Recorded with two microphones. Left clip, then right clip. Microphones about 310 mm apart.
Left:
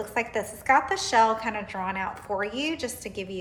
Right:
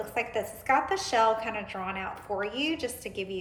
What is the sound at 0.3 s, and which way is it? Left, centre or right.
A woman's voice, centre.